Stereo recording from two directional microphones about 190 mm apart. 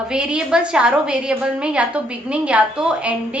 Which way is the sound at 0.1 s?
5° right (ahead or behind).